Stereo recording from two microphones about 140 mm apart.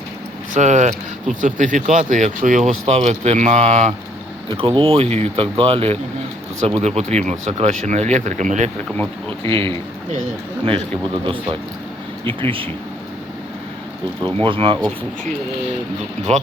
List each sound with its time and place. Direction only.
0.5 s speech: 60° right (ahead or behind)
2.8 s speech: 50° right (ahead or behind)
4.4 s speech: 40° right (ahead or behind); by 8.7 s 60° right (ahead or behind)
9.5 s speech: 40° right (ahead or behind)
11.2 s speech: 35° right (ahead or behind)
14.4 s speech: 40° right (ahead or behind)
16.3 s speech: 50° right (ahead or behind)